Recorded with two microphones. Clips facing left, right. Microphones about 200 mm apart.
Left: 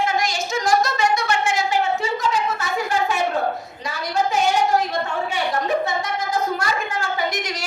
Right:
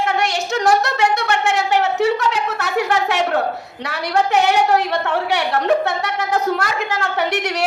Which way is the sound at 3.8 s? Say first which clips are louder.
Right 4 dB; 70° right (ahead or behind).